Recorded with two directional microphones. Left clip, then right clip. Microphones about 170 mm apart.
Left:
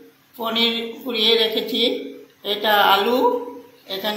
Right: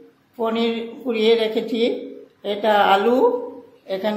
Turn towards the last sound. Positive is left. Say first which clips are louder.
# right 2 dB
turn(degrees=-45)  # may be behind; listen again after turning